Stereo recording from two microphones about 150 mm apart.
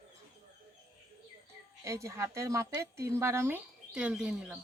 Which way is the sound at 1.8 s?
20° right (ahead or behind).